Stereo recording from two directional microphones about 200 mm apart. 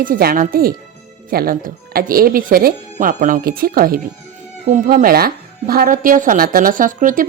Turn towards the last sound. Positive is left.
turn(degrees=-40)  # may be behind; listen again after turning